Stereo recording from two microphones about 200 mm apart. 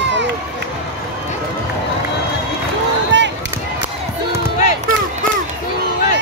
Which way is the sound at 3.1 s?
65° right (ahead or behind).